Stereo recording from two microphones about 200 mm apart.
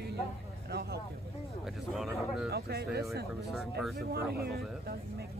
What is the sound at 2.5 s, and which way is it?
Speech, 50° right (ahead or behind).